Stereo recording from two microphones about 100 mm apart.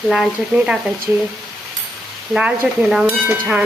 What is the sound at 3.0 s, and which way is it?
Frying, 15° right (ahead or behind).